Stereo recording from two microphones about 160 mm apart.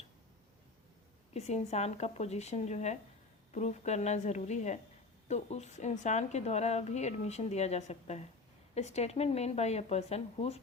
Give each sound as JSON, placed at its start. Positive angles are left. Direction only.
{"t": 1.3, "sound": "speech", "side_deg": 45}